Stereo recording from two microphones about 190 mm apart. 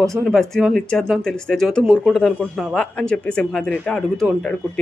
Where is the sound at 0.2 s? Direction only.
Centre (ahead or behind).